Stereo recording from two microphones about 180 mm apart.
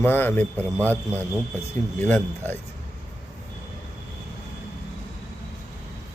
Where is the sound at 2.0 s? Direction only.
10° left (ahead or behind).